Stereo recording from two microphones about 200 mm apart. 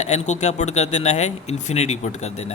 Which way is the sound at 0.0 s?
35° left (ahead or behind).